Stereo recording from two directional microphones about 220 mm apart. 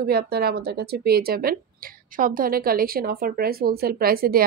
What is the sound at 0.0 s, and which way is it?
A woman's voice, 45° right (ahead or behind).